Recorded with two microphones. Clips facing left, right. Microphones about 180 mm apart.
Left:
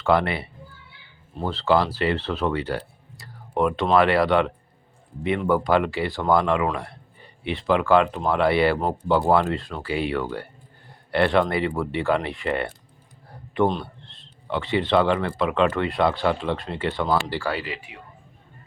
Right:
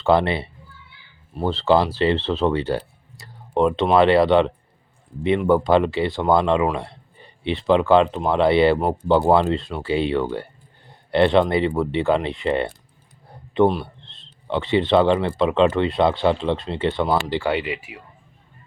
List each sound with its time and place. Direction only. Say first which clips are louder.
0.0 s speech: right 3 dB; 25° right (ahead or behind)